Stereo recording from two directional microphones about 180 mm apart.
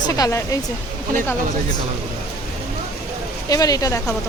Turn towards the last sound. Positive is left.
turn(degrees=20)  # may be behind; listen again after turning